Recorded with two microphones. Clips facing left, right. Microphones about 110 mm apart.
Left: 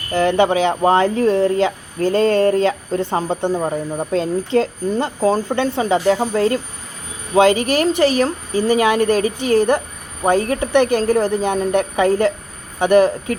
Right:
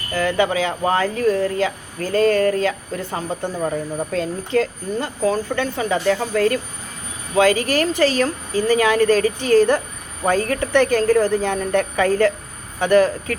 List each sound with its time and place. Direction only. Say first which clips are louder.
0.1 s speech: left 4 dB; 25° left (ahead or behind)